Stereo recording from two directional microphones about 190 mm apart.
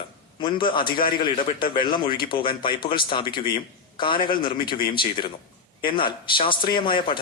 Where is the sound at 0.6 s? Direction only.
50° left (ahead or behind).